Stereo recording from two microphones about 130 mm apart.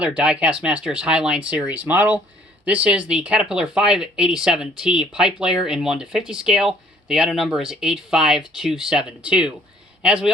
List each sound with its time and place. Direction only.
0.0 s speech: 10° right (ahead or behind)